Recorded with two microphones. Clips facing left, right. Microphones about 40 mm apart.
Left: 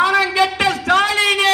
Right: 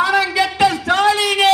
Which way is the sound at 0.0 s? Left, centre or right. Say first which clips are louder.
Left 1 dB; left.